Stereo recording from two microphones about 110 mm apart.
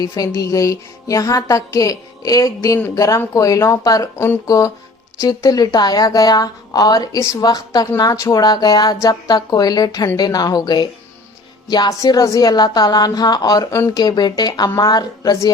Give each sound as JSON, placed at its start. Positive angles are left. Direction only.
{"t": 0.0, "sound": "speech", "side_deg": 35}